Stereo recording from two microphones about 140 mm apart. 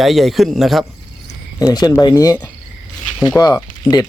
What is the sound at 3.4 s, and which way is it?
Speech, 10° left (ahead or behind).